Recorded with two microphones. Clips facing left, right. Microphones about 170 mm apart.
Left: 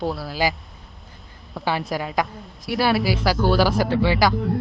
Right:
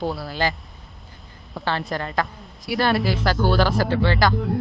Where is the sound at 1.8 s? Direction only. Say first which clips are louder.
Left 1 dB; 5° left (ahead or behind).